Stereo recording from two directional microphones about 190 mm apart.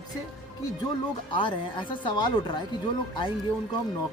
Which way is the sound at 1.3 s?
25° left (ahead or behind).